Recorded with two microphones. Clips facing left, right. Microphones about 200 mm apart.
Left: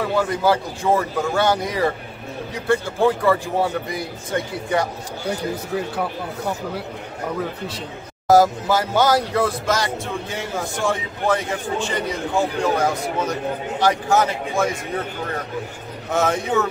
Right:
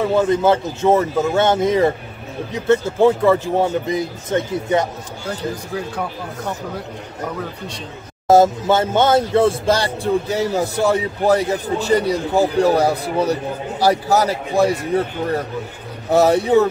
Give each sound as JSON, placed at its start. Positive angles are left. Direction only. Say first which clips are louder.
{"t": 0.1, "sound": "speech", "louder": "right 3 dB", "side_deg": -20}
{"t": 5.2, "sound": "speech", "louder": "even", "side_deg": 10}
{"t": 8.3, "sound": "speech", "louder": "right 2 dB", "side_deg": -25}
{"t": 16.1, "sound": "speech", "louder": "right 7 dB", "side_deg": -35}